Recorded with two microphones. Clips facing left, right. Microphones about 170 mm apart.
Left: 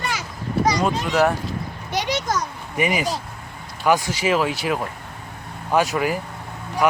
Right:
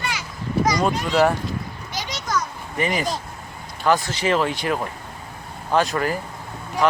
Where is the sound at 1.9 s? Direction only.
65° left (ahead or behind).